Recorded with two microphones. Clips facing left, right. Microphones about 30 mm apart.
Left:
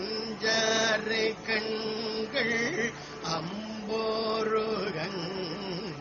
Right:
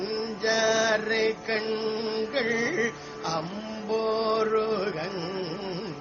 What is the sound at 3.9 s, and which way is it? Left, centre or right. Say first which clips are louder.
Music: right 4 dB; centre.